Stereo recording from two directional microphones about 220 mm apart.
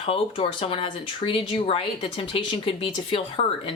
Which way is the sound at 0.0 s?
25° left (ahead or behind).